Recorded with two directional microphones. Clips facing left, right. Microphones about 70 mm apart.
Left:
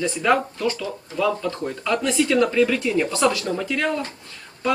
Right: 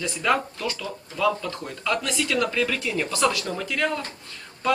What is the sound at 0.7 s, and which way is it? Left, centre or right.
Speech, centre.